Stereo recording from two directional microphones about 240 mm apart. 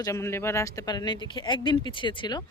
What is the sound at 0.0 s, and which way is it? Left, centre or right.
Speech, centre.